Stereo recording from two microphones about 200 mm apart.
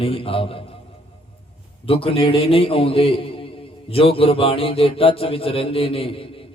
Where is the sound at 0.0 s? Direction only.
30° left (ahead or behind).